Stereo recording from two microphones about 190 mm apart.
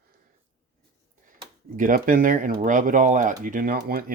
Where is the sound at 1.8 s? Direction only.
45° right (ahead or behind).